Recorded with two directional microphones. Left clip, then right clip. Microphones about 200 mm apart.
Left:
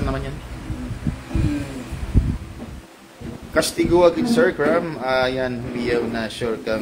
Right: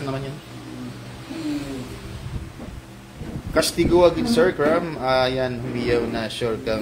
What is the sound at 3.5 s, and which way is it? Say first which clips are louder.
A man's voice: left 1 dB; 10° left (ahead or behind).